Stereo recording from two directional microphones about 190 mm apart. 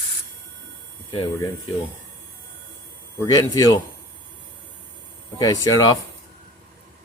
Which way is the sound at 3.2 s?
15° left (ahead or behind).